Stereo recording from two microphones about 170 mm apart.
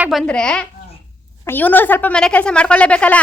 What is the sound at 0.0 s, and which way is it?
Speech, centre (ahead or behind).